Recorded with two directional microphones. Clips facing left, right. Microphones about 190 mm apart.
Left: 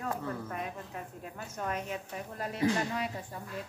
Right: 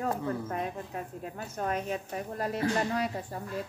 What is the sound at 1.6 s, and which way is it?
A woman's voice, 40° right (ahead or behind).